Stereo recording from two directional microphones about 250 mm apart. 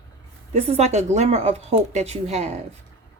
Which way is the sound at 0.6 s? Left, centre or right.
Right.